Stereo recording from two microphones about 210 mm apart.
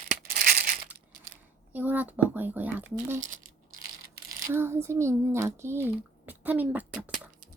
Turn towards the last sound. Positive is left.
turn(degrees=-5)  # may be behind; listen again after turning